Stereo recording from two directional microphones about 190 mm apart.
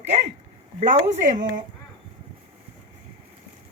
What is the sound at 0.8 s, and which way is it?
Speech, 40° right (ahead or behind).